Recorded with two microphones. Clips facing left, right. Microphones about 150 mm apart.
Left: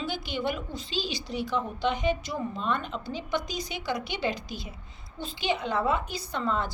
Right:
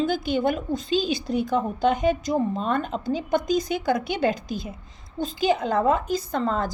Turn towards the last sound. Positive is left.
turn(degrees=-40)  # may be behind; listen again after turning